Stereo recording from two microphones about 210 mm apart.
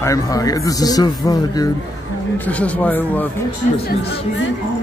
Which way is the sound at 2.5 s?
5° left (ahead or behind).